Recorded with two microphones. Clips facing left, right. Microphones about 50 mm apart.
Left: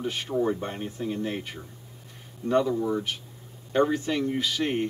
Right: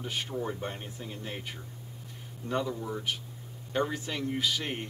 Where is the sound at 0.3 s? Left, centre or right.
Centre.